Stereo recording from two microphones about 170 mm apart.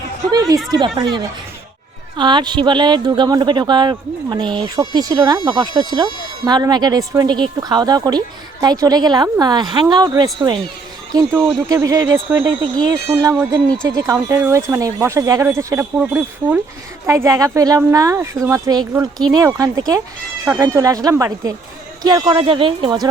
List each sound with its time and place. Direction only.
0.3 s speech: 20° right (ahead or behind)